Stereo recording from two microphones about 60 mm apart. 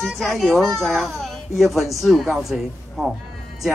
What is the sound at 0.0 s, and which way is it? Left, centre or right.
A man's voice, centre.